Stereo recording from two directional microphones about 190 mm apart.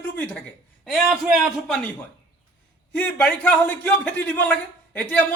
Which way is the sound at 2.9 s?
5° left (ahead or behind).